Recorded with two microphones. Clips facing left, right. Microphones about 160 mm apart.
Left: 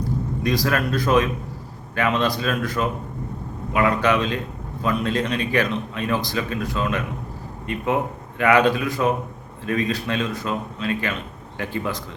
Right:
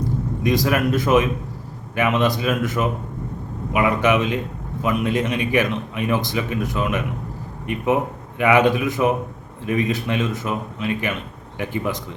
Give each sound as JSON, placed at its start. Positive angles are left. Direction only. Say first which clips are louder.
{"t": 0.4, "sound": "speech", "louder": "right 3 dB", "side_deg": -20}
{"t": 8.4, "sound": "speech", "louder": "right 1 dB", "side_deg": -20}